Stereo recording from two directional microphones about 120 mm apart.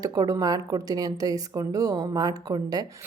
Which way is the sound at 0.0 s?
30° right (ahead or behind).